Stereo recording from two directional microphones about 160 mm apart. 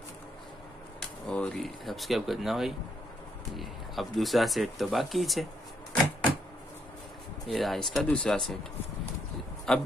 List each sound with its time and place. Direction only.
1.2 s speech: 5° left (ahead or behind)
7.4 s speech: centre (ahead or behind)
9.7 s a man's voice: 5° left (ahead or behind)